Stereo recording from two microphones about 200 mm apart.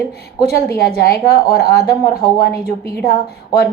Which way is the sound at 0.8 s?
50° left (ahead or behind).